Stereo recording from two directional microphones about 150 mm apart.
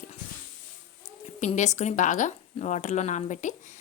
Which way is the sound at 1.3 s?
55° left (ahead or behind).